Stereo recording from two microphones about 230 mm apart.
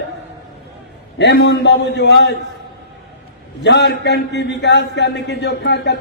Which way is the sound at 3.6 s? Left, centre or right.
Left.